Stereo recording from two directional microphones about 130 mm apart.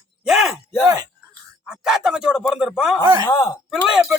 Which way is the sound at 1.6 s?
5° right (ahead or behind).